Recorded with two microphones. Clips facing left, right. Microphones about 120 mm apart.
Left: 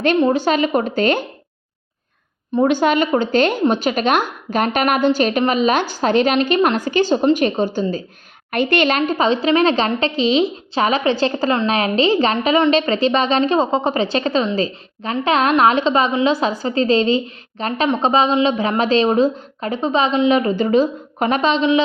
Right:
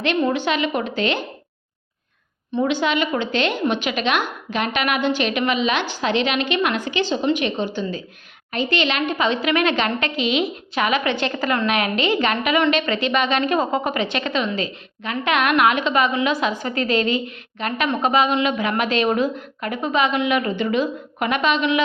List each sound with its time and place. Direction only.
0.2 s a woman's voice: 35° left (ahead or behind)
2.6 s a woman's voice: 45° left (ahead or behind)
8.4 s a woman's voice: 55° left (ahead or behind); by 21.8 s 25° left (ahead or behind)